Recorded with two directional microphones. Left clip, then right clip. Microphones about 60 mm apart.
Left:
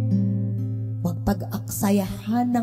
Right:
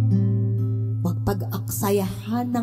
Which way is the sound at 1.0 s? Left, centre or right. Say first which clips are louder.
Even; left.